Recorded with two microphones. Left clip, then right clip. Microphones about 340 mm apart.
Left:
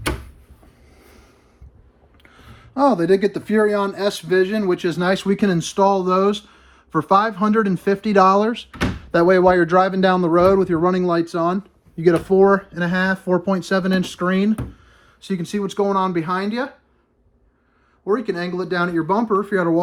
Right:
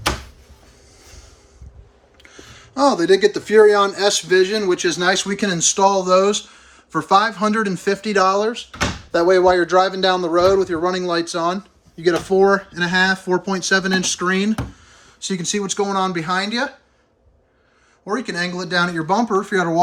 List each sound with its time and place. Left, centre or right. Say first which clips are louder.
2.2 s speech: right 5 dB; centre
18.0 s speech: left 1 dB; centre